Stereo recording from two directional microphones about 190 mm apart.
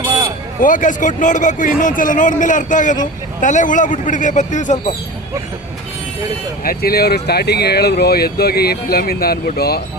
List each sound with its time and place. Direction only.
0.6 s speech: 45° left (ahead or behind)
6.7 s speech: 55° left (ahead or behind)